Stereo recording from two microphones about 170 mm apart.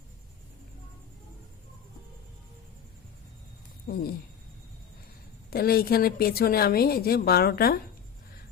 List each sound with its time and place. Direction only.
3.8 s a woman's voice: 65° left (ahead or behind)
5.5 s a woman's voice: 65° left (ahead or behind)